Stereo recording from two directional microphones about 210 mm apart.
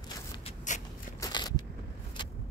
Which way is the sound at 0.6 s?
35° left (ahead or behind).